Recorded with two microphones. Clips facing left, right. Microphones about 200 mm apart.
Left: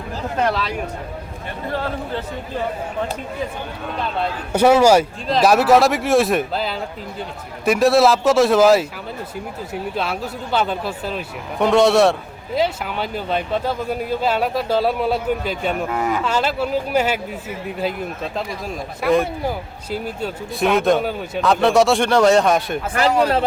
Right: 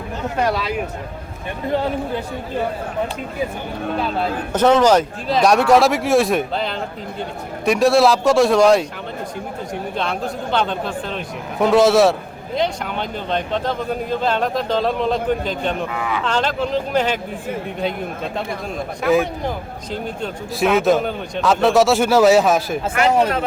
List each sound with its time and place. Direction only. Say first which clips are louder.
0.3 s speech: even; 10° right (ahead or behind)
1.7 s speech: right 4 dB; 20° right (ahead or behind)
4.5 s speech: left 1 dB; 10° left (ahead or behind)
9.9 s speech: right 3 dB; 5° left (ahead or behind)
15.9 s speech: left 3 dB; 45° left (ahead or behind)
16.2 s speech: even; 5° left (ahead or behind)
19.0 s speech: even; centre (ahead or behind)